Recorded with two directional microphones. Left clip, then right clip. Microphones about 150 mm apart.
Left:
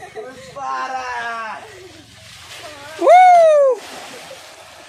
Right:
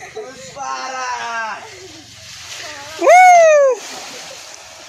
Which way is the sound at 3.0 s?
20° left (ahead or behind).